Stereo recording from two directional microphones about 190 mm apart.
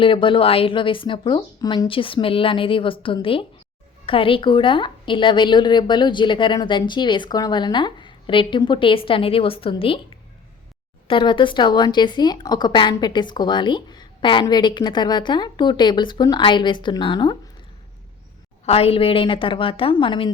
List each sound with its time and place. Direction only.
0.0 s a woman's voice: 25° left (ahead or behind)
11.1 s a woman's voice: 25° left (ahead or behind)
18.6 s a woman's voice: 30° left (ahead or behind)